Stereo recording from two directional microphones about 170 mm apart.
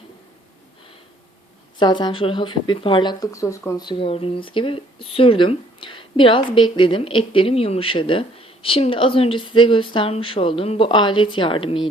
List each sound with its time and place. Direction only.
1.8 s speech: 25° left (ahead or behind)